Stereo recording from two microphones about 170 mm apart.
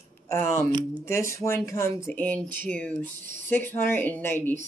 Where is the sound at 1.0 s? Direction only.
15° left (ahead or behind).